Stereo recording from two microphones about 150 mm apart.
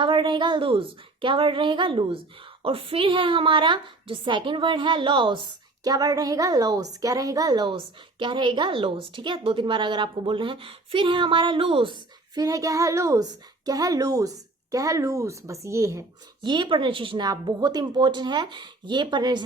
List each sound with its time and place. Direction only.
0.0 s a woman's voice: 35° right (ahead or behind)